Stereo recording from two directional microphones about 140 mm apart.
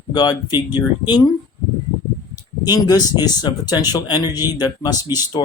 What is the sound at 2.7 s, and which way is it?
Speech, 30° left (ahead or behind).